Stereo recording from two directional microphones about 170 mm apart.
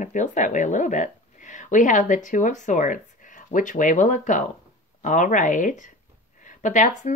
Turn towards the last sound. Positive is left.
turn(degrees=45)  # may be behind; listen again after turning